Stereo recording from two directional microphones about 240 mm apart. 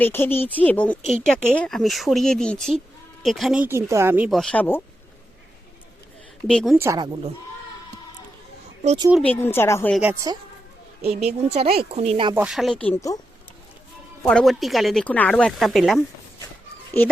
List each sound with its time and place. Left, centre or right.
0.0 s speech: centre
6.5 s speech: centre
6.7 s speech: centre
8.8 s speech: right
9.2 s a woman's voice: centre
9.9 s speech: centre
11.0 s a woman's voice: right
12.3 s speech: centre
14.3 s speech: centre